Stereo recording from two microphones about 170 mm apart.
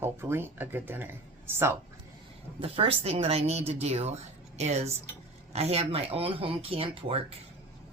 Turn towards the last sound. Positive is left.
turn(degrees=-35)  # may be behind; listen again after turning